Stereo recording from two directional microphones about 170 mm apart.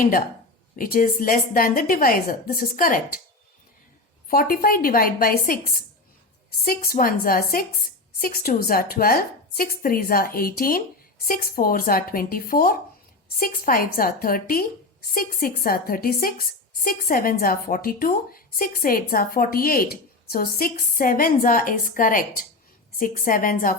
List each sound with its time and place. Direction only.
0.8 s a woman's voice: 55° left (ahead or behind)
4.3 s a woman's voice: 60° left (ahead or behind)
6.9 s a woman's voice: 55° left (ahead or behind)